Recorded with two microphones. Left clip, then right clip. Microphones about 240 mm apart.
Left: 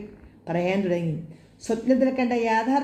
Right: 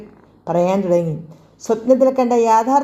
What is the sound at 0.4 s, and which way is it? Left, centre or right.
A woman's voice, right.